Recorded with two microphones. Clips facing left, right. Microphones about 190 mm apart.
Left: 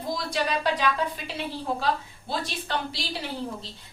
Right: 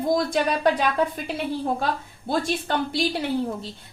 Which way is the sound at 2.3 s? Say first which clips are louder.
Right 6 dB; 50° right (ahead or behind).